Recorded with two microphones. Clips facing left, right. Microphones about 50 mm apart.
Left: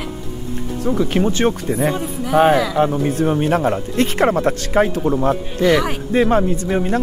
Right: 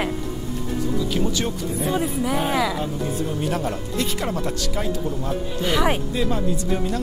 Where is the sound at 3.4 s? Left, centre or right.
Left.